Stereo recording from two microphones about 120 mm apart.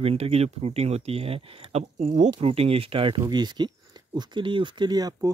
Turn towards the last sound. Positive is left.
turn(degrees=-35)  # may be behind; listen again after turning